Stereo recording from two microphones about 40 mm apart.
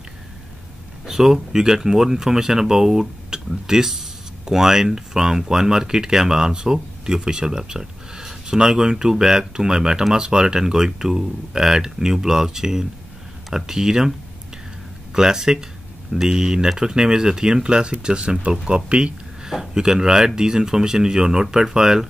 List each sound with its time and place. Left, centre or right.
1.0 s speech: centre
15.1 s speech: centre
19.5 s speech: centre